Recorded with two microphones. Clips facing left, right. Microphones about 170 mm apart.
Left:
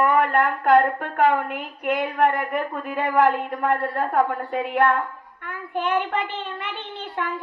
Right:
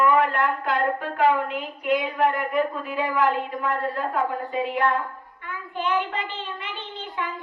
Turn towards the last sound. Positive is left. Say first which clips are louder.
# left 2 dB
turn(degrees=60)  # may be behind; listen again after turning